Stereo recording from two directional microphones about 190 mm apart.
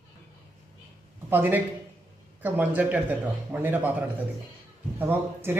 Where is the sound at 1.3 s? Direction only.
10° right (ahead or behind).